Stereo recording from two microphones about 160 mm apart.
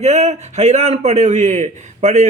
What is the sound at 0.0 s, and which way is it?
A man's voice, 45° right (ahead or behind).